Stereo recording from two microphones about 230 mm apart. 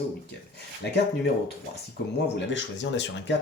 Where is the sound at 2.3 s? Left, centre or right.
Left.